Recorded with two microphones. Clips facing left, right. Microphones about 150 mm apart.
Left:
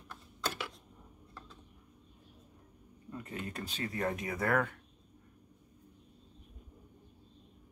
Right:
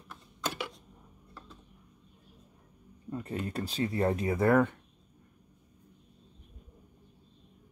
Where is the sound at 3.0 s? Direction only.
35° right (ahead or behind).